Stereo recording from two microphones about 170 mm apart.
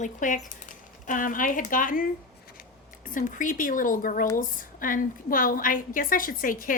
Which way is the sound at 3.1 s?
50° left (ahead or behind).